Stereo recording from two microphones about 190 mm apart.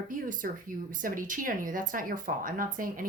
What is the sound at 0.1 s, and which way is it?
A woman's voice, 45° right (ahead or behind).